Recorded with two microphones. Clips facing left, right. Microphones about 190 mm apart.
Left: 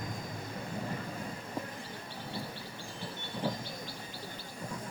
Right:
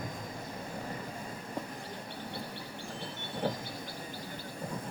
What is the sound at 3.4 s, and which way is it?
Train, 55° right (ahead or behind).